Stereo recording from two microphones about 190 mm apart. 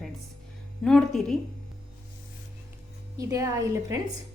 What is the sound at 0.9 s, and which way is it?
Speech, centre (ahead or behind).